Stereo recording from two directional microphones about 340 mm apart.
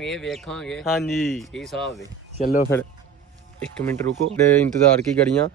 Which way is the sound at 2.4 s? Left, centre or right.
Left.